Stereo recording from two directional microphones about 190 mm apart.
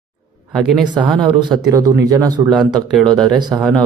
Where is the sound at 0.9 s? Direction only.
25° right (ahead or behind).